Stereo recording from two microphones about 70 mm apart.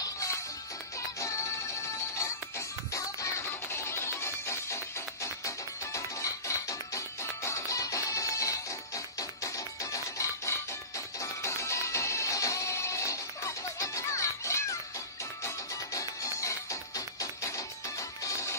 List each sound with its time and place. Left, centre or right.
0.0 s music: left
1.8 s music: left